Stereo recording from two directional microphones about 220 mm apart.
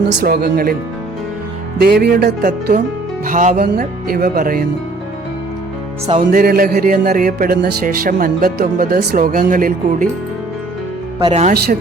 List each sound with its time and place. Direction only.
0.0 s speech: 45° right (ahead or behind)
1.8 s speech: 45° right (ahead or behind)
6.1 s speech: 40° right (ahead or behind)
11.2 s speech: 25° right (ahead or behind)
11.5 s speech: 45° right (ahead or behind)